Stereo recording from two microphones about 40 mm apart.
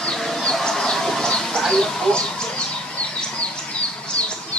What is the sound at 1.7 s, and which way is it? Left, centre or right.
Bird, centre.